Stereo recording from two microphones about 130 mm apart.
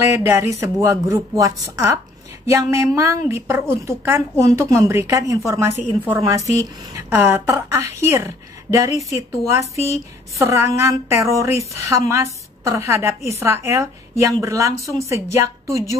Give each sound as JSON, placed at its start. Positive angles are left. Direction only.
{"t": 0.0, "sound": "a woman's voice", "side_deg": -20}
{"t": 10.4, "sound": "a woman's voice", "side_deg": -20}